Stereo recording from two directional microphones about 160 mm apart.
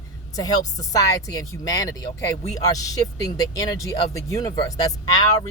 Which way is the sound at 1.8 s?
20° left (ahead or behind).